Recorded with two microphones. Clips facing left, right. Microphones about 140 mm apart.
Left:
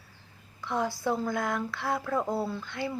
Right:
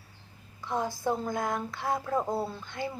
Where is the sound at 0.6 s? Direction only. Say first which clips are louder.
Left 1 dB; 20° right (ahead or behind).